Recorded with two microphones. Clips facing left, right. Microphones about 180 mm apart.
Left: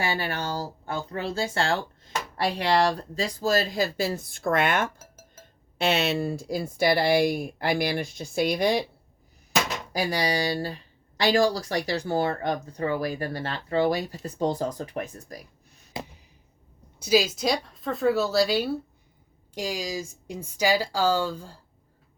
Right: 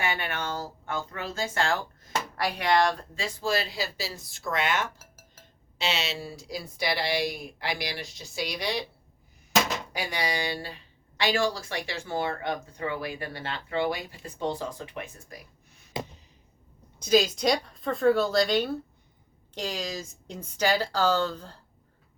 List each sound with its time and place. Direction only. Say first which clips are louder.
0.0 s speech: left 3 dB; 35° left (ahead or behind); by 8.8 s 50° left (ahead or behind)
9.9 s speech: left 5 dB; 35° left (ahead or behind)
17.0 s a woman's voice: even; 5° left (ahead or behind)